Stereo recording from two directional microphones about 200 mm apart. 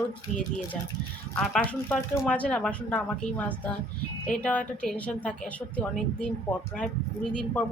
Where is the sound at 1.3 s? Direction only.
5° left (ahead or behind).